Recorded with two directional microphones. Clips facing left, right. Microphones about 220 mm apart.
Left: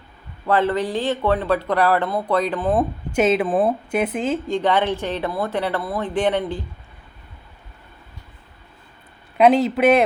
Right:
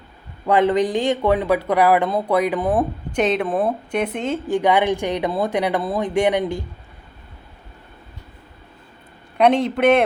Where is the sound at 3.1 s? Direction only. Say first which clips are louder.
Left 3 dB; 5° left (ahead or behind).